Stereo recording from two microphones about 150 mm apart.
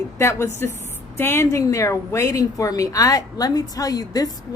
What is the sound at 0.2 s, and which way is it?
Speech, 20° left (ahead or behind).